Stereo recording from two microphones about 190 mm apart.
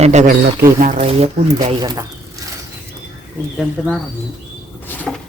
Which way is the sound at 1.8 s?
20° right (ahead or behind).